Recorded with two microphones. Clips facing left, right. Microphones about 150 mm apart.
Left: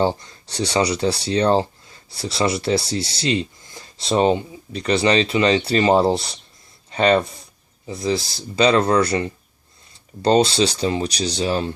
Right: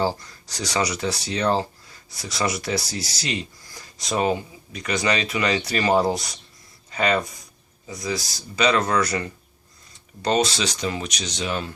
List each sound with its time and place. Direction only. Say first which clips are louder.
0.0 s speech: left 4 dB; 25° left (ahead or behind)